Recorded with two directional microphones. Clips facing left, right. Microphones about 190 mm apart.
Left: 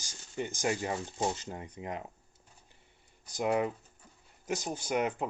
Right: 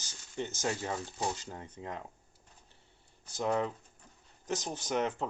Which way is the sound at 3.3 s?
10° left (ahead or behind).